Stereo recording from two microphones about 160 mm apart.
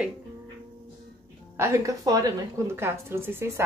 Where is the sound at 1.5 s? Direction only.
20° right (ahead or behind).